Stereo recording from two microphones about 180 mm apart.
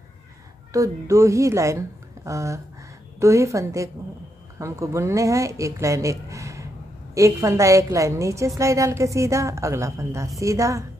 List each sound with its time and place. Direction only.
0.7 s a woman's voice: 20° right (ahead or behind)